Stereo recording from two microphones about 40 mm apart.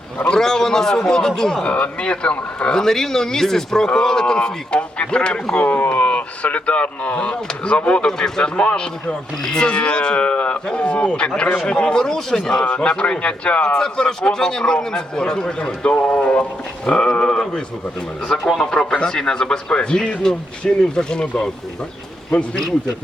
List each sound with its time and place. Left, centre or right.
0.3 s speech: centre
1.6 s a man's voice: left
2.7 s a man's voice: centre
5.6 s speech: left
5.9 s a man's voice: left
11.9 s speech: centre
12.8 s a man's voice: left
13.7 s a man's voice: centre
16.0 s speech: left
16.8 s a man's voice: left